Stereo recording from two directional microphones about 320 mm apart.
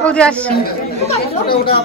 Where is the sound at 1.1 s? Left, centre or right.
Centre.